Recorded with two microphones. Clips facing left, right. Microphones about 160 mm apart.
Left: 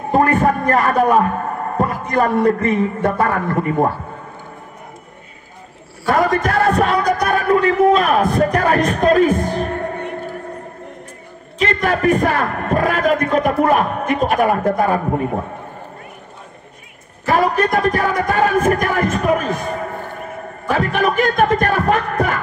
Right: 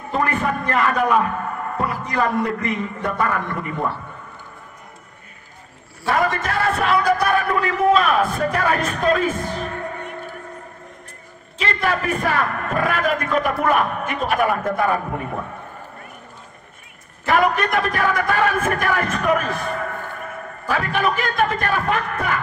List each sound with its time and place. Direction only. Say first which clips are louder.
0.1 s a man's voice: left 7 dB; 45° left (ahead or behind)
6.0 s a man's voice: left 5 dB; 40° left (ahead or behind)
11.6 s a man's voice: left 6 dB; 40° left (ahead or behind)
17.3 s a man's voice: left 3 dB; 35° left (ahead or behind)